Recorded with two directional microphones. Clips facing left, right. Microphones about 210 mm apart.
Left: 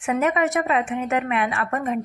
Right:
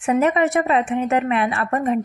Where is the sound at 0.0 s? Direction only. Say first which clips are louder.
Right 4 dB; 35° right (ahead or behind).